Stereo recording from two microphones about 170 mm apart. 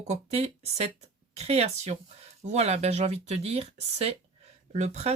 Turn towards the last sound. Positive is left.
turn(degrees=-40)  # may be behind; listen again after turning